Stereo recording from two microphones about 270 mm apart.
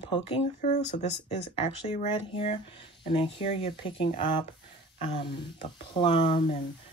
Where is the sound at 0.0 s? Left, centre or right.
Centre.